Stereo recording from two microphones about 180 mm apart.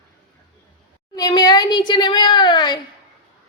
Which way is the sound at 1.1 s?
20° left (ahead or behind).